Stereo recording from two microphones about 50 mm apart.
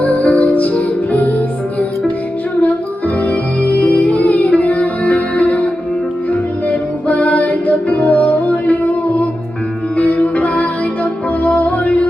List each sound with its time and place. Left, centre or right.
0.0 s music: left
3.2 s music: left